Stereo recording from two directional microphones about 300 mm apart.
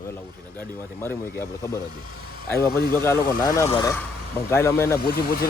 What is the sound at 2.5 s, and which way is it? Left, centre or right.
Speech, centre.